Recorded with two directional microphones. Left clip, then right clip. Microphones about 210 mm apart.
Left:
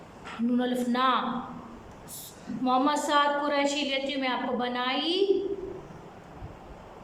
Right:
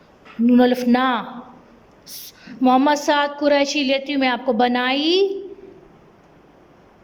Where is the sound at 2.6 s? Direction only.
35° right (ahead or behind).